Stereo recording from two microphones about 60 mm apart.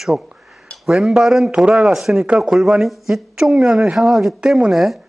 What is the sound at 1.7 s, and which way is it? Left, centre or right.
Speech, centre.